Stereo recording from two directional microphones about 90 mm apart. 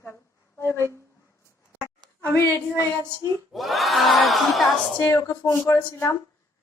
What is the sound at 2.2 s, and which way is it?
Speech, 30° right (ahead or behind).